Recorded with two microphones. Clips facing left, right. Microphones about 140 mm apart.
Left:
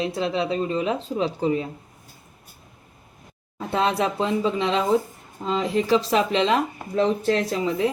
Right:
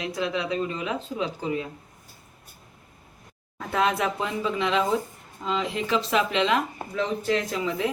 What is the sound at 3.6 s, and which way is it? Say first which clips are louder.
Speech: left 2 dB; 30° left (ahead or behind).